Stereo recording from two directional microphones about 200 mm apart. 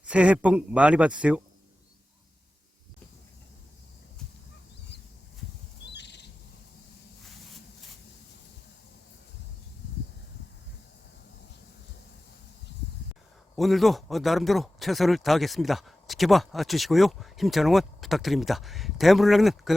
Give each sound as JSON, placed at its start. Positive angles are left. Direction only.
{"t": 0.0, "sound": "speech", "side_deg": -5}
{"t": 5.8, "sound": "owl", "side_deg": 60}
{"t": 13.6, "sound": "speech", "side_deg": 0}